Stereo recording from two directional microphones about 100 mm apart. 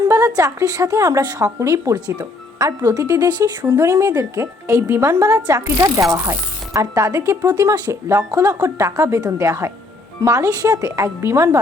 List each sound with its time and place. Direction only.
0.1 s speech: 30° right (ahead or behind)
3.8 s speech: 30° right (ahead or behind)